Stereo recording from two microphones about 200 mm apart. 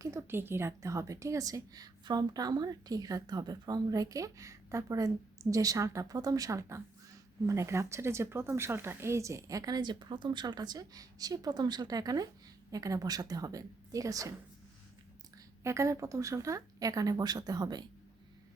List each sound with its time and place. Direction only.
0.0 s a woman's voice: 15° right (ahead or behind)
15.6 s a woman's voice: 15° right (ahead or behind)